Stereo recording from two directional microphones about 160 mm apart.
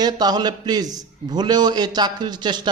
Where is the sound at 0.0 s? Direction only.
25° right (ahead or behind).